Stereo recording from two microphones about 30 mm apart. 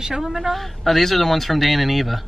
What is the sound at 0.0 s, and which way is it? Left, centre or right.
Speech, centre.